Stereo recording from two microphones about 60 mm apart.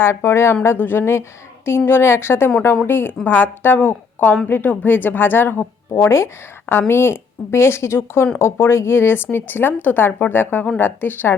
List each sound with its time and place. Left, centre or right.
0.0 s a woman's voice: left